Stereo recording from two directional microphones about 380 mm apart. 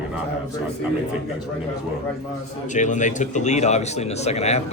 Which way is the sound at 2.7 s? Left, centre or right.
Centre.